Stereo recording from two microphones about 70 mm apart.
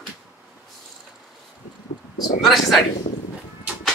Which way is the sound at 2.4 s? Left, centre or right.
Centre.